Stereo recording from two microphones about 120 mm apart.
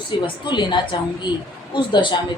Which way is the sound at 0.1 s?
40° left (ahead or behind).